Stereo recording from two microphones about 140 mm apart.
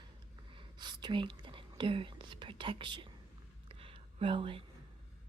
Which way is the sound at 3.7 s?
40° right (ahead or behind).